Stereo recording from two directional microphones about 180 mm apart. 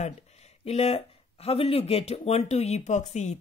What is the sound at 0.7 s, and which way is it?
Speech, 35° left (ahead or behind).